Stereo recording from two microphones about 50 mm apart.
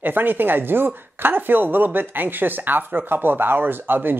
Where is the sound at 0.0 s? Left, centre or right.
Right.